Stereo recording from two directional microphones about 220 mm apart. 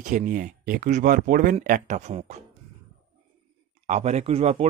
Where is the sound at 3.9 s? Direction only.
30° right (ahead or behind).